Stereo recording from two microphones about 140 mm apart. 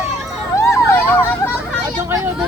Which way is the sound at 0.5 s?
20° left (ahead or behind).